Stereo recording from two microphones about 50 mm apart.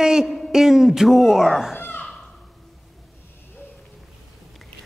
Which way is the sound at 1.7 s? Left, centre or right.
Left.